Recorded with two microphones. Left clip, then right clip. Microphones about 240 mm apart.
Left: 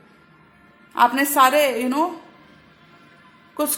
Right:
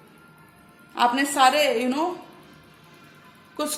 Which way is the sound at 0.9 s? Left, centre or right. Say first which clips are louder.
Left 4 dB; left.